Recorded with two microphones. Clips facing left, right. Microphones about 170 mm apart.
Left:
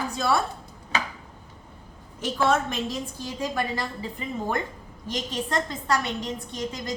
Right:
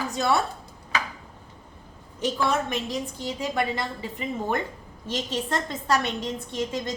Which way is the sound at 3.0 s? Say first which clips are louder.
Right 1 dB; 20° right (ahead or behind).